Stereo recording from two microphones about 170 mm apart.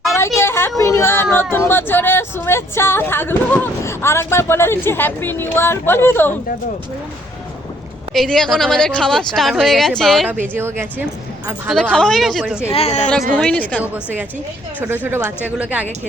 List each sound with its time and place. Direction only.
0.1 s a sound: 15° left (ahead or behind)
0.8 s speech: 15° left (ahead or behind)
8.1 s speech: centre (ahead or behind)
10.4 s speech: 15° right (ahead or behind)
11.7 s speech: 5° left (ahead or behind)
12.7 s speech: 40° left (ahead or behind)
13.3 s speech: 10° left (ahead or behind)
13.8 s speech: 10° right (ahead or behind)